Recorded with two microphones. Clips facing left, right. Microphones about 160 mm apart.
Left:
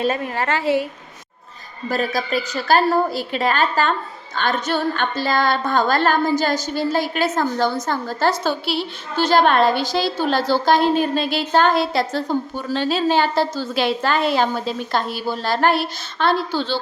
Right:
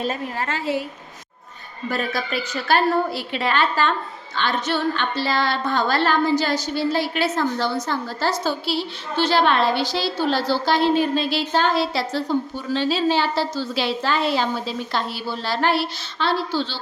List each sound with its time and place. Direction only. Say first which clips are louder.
0.0 s a woman's voice: left 4 dB; 75° left (ahead or behind)
1.9 s a woman's voice: left 4 dB; 40° left (ahead or behind); by 8.8 s 60° left (ahead or behind)
9.1 s a woman's voice: left 3 dB; 45° left (ahead or behind)